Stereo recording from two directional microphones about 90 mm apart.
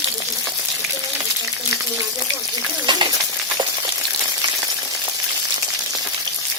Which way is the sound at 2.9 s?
55° right (ahead or behind).